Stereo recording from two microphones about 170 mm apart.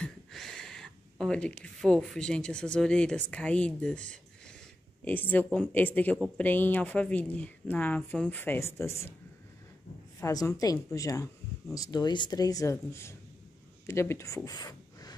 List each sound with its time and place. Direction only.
0.0 s a woman's voice: centre (ahead or behind)
10.2 s speech: 20° left (ahead or behind)